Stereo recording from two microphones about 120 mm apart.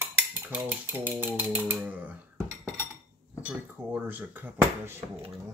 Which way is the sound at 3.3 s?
10° right (ahead or behind).